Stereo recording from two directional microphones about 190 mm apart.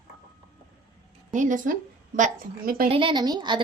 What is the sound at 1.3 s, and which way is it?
A woman's voice, 45° right (ahead or behind).